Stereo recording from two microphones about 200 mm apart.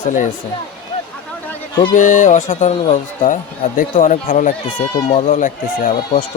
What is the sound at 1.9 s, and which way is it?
Speech, 40° left (ahead or behind).